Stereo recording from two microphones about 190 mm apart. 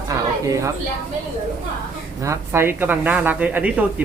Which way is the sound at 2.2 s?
15° right (ahead or behind).